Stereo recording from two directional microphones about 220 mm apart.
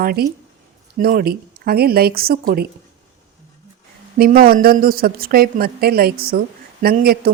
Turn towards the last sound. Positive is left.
turn(degrees=-45)  # may be behind; listen again after turning